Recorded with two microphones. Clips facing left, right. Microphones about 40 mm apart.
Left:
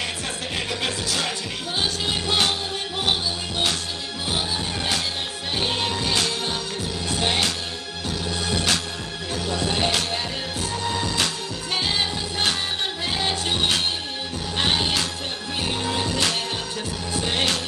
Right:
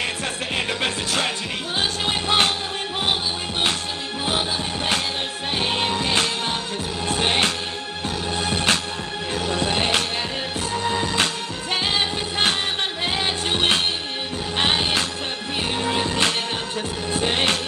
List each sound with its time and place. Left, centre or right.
0.6 s music: right
5.6 s music: right
13.1 s music: right